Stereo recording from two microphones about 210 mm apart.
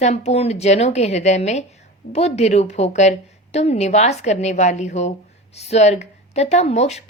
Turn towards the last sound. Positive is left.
turn(degrees=30)  # may be behind; listen again after turning